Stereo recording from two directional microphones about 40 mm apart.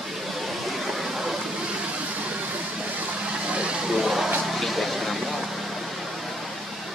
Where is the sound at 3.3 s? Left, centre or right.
Right.